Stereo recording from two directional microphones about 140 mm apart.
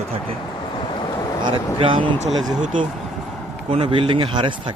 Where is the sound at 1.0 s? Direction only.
30° left (ahead or behind).